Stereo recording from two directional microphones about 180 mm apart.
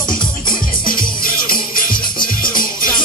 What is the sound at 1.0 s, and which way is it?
Music, 50° left (ahead or behind).